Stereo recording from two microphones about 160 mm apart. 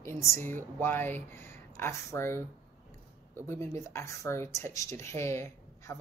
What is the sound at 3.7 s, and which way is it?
Speech, 20° left (ahead or behind).